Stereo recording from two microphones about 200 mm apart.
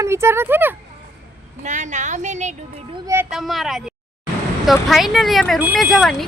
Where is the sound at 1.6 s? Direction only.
35° right (ahead or behind).